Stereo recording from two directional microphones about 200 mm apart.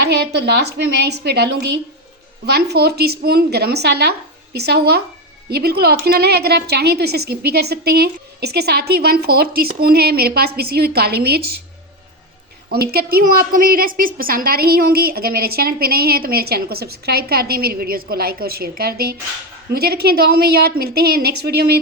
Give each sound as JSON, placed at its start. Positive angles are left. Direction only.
{"t": 0.0, "sound": "a woman's voice", "side_deg": -55}
{"t": 12.7, "sound": "a woman's voice", "side_deg": -50}